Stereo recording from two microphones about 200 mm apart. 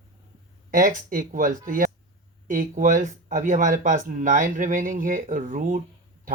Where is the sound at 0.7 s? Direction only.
45° right (ahead or behind).